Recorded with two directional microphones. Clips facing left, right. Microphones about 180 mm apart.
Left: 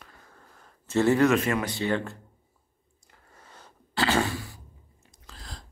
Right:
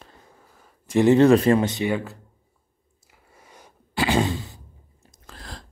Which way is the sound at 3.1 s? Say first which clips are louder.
Right 2 dB; 10° right (ahead or behind).